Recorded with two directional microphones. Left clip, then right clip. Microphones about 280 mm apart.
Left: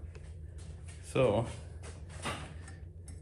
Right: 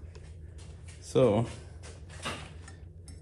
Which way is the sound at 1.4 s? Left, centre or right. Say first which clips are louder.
Right 2 dB; centre.